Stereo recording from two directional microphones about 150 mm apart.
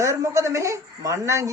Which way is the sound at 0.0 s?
20° right (ahead or behind).